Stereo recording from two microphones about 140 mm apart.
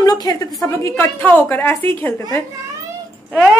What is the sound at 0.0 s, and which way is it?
A woman's voice, 30° left (ahead or behind).